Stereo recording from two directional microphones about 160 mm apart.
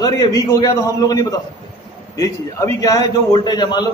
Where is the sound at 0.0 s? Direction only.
20° left (ahead or behind).